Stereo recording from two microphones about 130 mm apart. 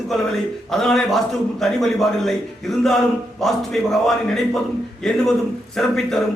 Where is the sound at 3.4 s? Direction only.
Centre (ahead or behind).